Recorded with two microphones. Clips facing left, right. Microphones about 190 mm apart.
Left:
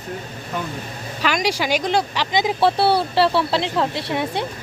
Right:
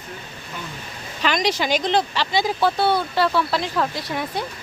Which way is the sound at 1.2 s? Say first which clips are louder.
Even; 10° left (ahead or behind).